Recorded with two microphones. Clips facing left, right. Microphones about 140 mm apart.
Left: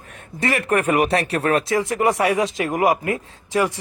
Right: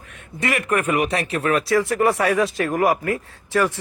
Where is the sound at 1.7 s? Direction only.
20° left (ahead or behind).